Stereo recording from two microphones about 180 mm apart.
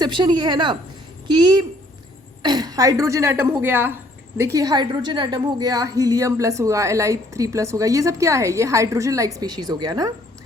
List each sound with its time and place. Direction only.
0.0 s a woman's voice: 25° right (ahead or behind)